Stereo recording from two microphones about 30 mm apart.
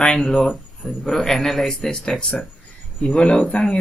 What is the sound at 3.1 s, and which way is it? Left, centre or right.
Speech, left.